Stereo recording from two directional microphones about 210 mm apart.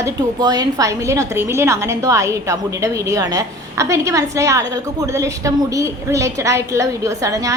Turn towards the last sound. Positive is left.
turn(degrees=-15)  # may be behind; listen again after turning